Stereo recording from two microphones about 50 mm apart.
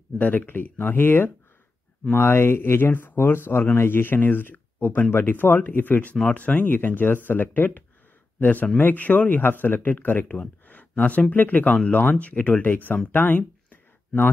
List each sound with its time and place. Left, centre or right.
0.2 s speech: left